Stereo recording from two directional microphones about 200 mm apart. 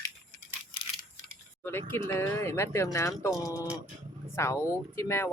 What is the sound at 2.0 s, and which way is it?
Speech, 15° left (ahead or behind).